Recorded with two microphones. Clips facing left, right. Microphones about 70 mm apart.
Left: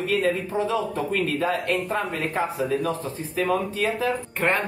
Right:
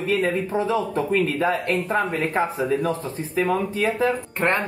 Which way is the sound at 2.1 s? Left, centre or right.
Right.